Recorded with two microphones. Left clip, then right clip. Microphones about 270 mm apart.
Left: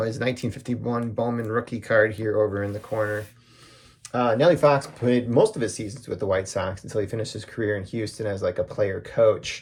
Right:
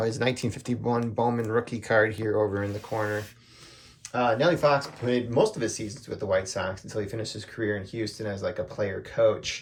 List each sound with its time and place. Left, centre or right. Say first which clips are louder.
0.0 s speech: left 1 dB; centre
4.1 s speech: left 4 dB; centre